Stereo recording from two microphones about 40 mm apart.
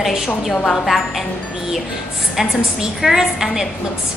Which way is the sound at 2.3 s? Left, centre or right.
Centre.